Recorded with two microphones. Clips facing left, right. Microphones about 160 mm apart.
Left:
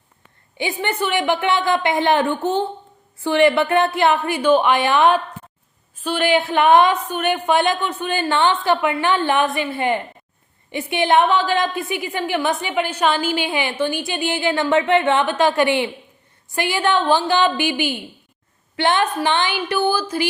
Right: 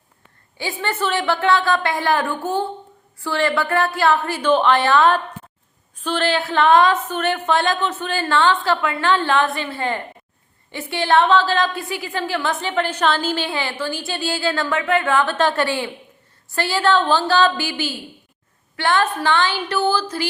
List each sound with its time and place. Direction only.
0.5 s a woman's voice: 20° left (ahead or behind)